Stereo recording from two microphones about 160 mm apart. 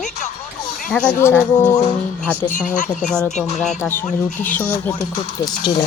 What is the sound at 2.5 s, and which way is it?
Speech, 50° left (ahead or behind).